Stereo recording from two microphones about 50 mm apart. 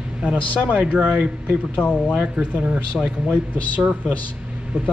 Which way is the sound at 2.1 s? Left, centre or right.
Right.